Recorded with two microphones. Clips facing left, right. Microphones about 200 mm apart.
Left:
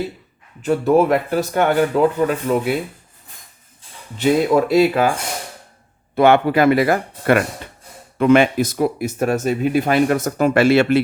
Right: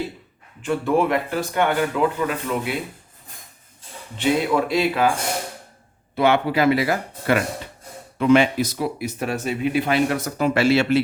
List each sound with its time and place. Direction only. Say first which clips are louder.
0.6 s speech: left 5 dB; 40° left (ahead or behind)
4.2 s speech: left 5 dB; 45° left (ahead or behind)
6.1 s speech: left 5 dB; 50° left (ahead or behind)